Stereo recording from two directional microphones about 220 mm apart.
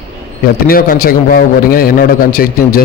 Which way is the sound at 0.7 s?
40° left (ahead or behind).